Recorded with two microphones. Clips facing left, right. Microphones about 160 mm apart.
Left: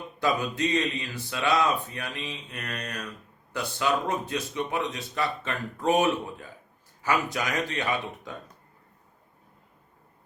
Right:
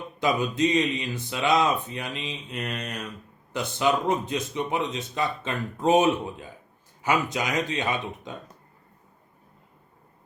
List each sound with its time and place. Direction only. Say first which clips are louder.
0.2 s speech: right 3 dB; 20° right (ahead or behind)